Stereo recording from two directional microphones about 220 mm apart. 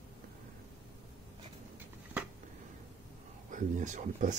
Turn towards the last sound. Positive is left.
turn(degrees=-35)  # may be behind; listen again after turning